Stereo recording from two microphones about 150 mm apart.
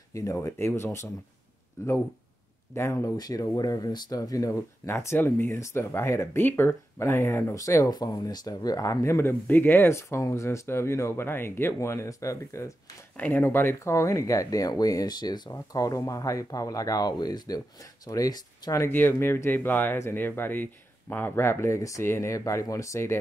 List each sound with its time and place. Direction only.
0.1 s speech: 20° left (ahead or behind)